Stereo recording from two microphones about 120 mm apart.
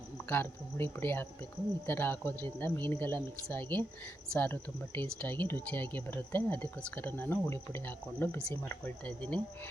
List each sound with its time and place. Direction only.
0.3 s speech: 15° left (ahead or behind)